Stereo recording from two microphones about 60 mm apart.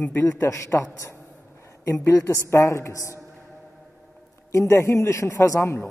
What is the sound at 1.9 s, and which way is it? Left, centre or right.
A man's voice, left.